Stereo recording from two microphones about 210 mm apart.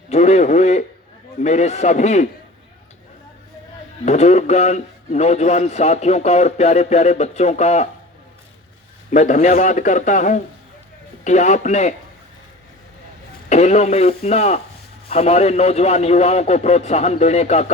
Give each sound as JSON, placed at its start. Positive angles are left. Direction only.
{"t": 0.1, "sound": "a man's voice", "side_deg": 30}
{"t": 4.0, "sound": "a man's voice", "side_deg": 35}
{"t": 9.0, "sound": "a man's voice", "side_deg": 35}
{"t": 13.5, "sound": "a man's voice", "side_deg": 35}